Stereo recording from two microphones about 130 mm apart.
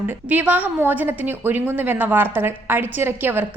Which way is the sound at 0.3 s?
10° right (ahead or behind).